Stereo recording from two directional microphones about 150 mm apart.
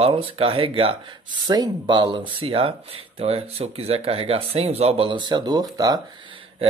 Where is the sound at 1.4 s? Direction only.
25° right (ahead or behind).